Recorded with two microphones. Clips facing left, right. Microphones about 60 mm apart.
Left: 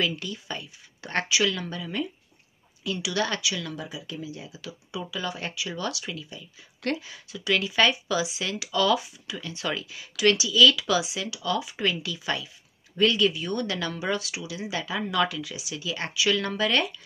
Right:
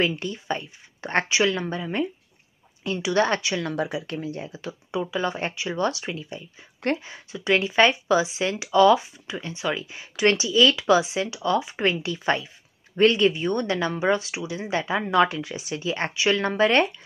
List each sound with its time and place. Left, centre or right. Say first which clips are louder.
0.0 s speech: right 4 dB; right
3.7 s speech: right 8 dB; right
9.6 s speech: right 3 dB; right